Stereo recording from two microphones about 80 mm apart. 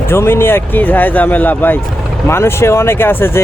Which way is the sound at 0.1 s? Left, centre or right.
Left.